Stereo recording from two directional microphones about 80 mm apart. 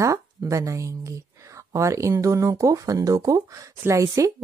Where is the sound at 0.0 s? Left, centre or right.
Right.